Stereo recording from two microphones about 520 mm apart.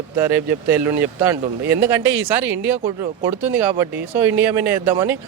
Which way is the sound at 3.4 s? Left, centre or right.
Right.